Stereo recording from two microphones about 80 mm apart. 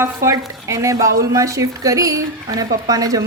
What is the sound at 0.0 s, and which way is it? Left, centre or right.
Speech, right.